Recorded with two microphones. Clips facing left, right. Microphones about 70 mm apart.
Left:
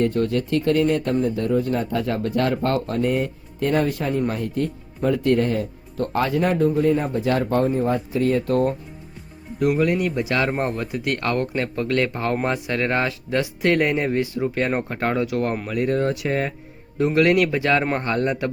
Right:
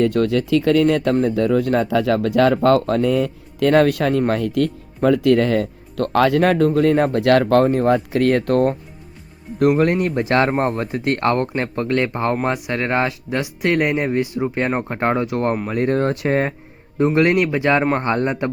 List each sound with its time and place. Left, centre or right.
0.1 s speech: right
4.3 s speech: right
11.9 s speech: right
17.0 s speech: right